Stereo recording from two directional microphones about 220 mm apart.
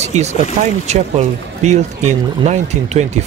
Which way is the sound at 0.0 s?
30° right (ahead or behind).